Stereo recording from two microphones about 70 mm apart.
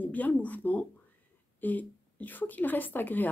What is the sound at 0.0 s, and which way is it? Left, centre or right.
A woman's voice, left.